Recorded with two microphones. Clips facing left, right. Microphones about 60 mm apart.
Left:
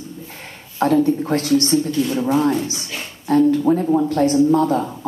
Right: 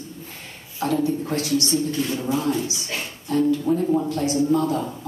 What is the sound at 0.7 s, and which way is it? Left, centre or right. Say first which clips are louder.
Speech: left 6 dB; left.